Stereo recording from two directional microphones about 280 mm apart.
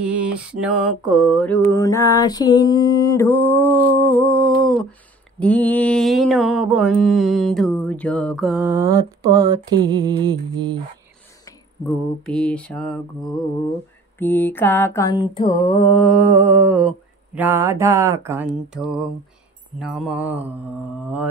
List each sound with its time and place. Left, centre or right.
0.0 s mantra: centre
4.0 s a sound: centre
5.4 s mantra: centre
12.3 s mantra: centre
15.6 s mantra: left
15.9 s mantra: centre
17.4 s a sound: centre
18.5 s mantra: centre